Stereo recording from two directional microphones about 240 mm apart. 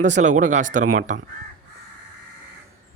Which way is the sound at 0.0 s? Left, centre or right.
Right.